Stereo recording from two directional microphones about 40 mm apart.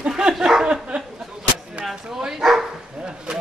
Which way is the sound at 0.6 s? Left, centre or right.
Right.